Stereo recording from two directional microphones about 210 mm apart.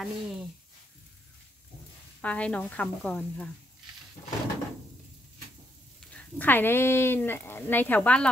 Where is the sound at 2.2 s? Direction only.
5° left (ahead or behind).